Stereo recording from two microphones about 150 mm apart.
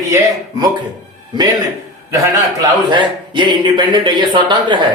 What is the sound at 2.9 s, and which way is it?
Speech, 30° right (ahead or behind).